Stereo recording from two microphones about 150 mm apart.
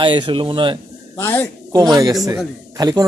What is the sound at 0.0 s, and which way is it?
Speech, 30° right (ahead or behind).